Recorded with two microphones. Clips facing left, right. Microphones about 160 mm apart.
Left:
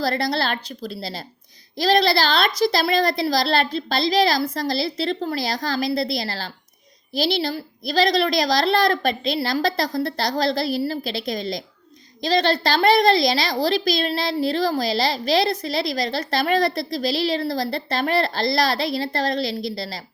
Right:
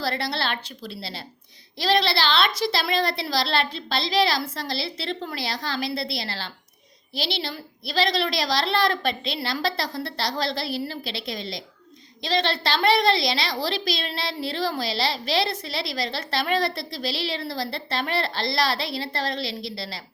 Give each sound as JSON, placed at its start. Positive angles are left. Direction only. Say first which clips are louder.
{"t": 0.0, "sound": "a woman's voice", "louder": "left 5 dB", "side_deg": 40}